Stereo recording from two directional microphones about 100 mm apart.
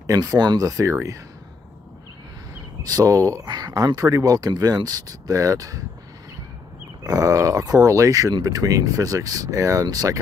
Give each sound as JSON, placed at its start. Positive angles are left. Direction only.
{"t": 0.0, "sound": "speech", "side_deg": -35}
{"t": 2.8, "sound": "speech", "side_deg": -35}
{"t": 7.0, "sound": "speech", "side_deg": -35}